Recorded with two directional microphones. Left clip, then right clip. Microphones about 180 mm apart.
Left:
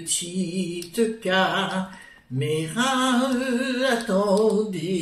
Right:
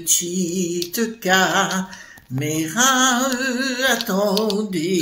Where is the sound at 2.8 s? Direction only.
45° right (ahead or behind).